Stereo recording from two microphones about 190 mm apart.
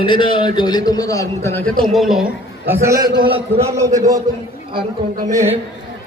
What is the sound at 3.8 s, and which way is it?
Speech, 15° right (ahead or behind).